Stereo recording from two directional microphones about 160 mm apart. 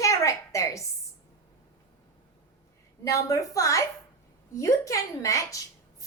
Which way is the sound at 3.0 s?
20° left (ahead or behind).